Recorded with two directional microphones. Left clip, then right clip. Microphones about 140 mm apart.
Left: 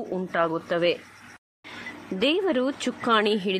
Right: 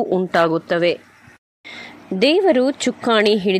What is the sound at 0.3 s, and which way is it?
Speech, 45° right (ahead or behind).